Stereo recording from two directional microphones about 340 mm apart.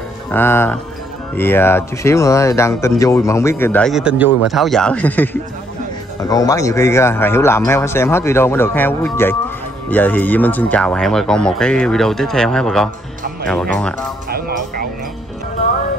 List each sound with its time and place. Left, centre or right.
0.3 s speech: centre